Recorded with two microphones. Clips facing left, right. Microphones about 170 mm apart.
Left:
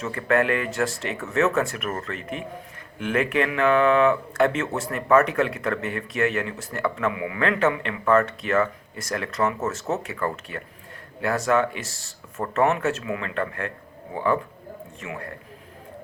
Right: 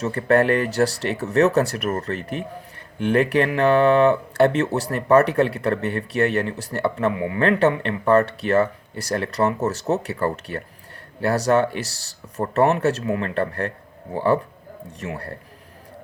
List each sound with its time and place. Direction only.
0.0 s speech: 35° right (ahead or behind)
11.8 s speech: 75° right (ahead or behind)
12.4 s speech: 35° right (ahead or behind)